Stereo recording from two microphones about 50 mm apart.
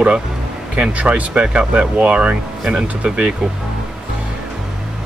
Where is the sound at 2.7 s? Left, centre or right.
Centre.